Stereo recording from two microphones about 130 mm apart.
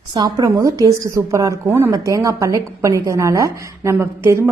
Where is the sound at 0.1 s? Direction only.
30° right (ahead or behind).